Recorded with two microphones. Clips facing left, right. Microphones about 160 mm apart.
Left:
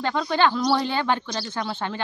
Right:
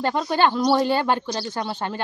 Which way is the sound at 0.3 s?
45° right (ahead or behind).